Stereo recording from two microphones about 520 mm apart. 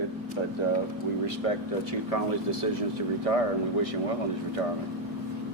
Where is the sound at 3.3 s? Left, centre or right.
Left.